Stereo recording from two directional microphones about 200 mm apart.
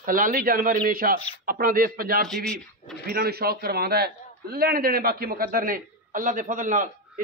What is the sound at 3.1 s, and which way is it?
A man's voice, 50° right (ahead or behind).